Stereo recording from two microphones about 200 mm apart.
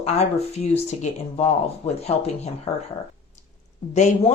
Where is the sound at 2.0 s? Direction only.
30° left (ahead or behind).